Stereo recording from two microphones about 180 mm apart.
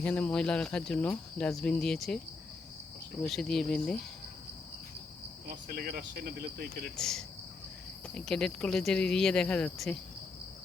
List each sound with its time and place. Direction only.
0.0 s speech: 5° left (ahead or behind)
3.2 s speech: centre (ahead or behind)
5.5 s speech: 55° right (ahead or behind)
6.9 s speech: 5° left (ahead or behind)